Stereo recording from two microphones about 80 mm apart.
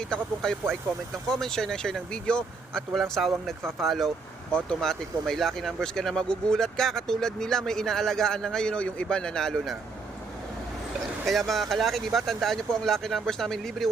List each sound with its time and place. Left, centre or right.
0.0 s speech: centre
11.3 s speech: centre